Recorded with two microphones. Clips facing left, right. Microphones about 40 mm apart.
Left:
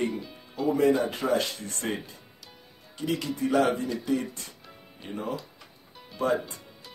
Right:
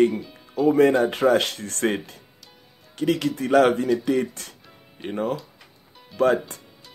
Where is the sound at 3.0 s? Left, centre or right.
Right.